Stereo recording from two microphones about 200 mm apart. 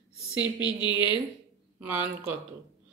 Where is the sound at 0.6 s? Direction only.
25° left (ahead or behind).